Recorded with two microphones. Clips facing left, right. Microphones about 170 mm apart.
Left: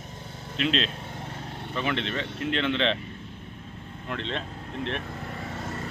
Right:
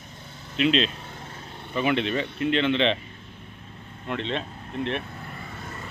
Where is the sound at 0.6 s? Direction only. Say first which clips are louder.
Right 5 dB; centre (ahead or behind).